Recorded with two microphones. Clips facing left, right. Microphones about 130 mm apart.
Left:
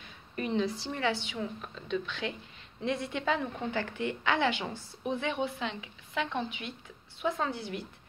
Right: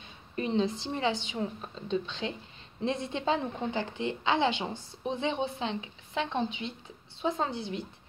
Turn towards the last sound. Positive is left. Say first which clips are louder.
# right 1 dB
turn(degrees=-25)  # may be behind; listen again after turning